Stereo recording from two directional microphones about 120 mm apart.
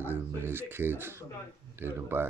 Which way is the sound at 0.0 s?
20° right (ahead or behind).